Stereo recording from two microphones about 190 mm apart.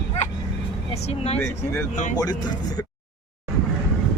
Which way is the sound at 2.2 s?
20° left (ahead or behind).